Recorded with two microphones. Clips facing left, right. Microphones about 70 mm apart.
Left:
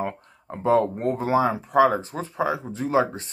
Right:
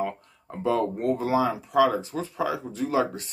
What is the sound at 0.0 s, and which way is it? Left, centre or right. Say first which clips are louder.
Speech: even; left.